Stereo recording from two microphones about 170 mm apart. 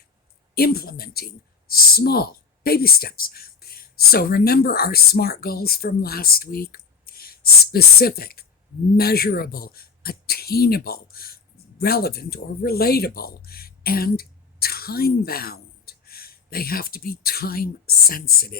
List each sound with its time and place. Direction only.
0.5 s speech: 65° left (ahead or behind)